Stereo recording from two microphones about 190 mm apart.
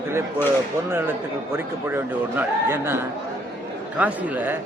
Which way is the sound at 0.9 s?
10° right (ahead or behind).